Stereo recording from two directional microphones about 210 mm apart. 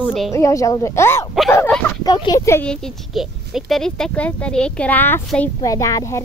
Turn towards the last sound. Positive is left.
turn(degrees=15)  # may be behind; listen again after turning